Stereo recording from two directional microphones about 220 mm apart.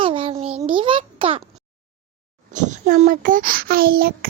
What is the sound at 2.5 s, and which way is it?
A child's voice, 35° right (ahead or behind).